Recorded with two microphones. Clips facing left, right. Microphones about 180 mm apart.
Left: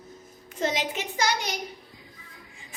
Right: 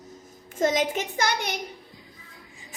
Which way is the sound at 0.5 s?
45° right (ahead or behind).